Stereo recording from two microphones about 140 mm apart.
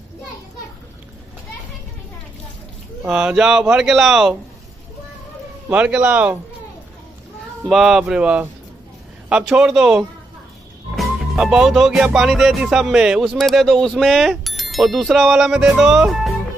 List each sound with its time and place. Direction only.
3.1 s music: 5° right (ahead or behind)
5.7 s speech: 10° right (ahead or behind)
7.6 s music: centre (ahead or behind)